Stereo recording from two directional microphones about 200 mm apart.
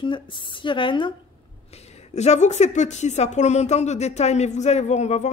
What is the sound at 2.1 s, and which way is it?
Speech, 35° left (ahead or behind).